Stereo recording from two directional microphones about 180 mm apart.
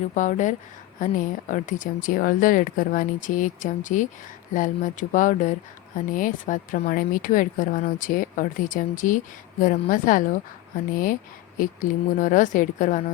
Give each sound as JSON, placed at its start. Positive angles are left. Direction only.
{"t": 0.1, "sound": "speech", "side_deg": 45}